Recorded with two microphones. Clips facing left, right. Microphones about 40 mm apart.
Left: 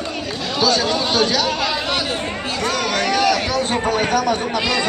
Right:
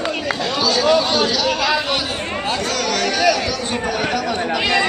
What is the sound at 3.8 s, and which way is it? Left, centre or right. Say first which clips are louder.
Chatter: left 1 dB; left.